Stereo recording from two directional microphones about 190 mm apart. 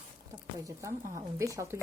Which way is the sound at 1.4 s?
15° right (ahead or behind).